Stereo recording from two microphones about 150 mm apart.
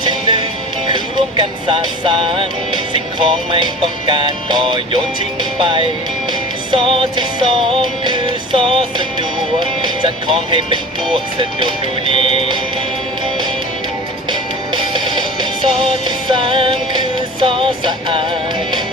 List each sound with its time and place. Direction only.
0.0 s music: 30° right (ahead or behind)
14.7 s music: 30° right (ahead or behind)